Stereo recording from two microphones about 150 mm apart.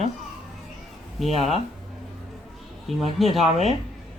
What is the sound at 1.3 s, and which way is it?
Speech, 45° right (ahead or behind).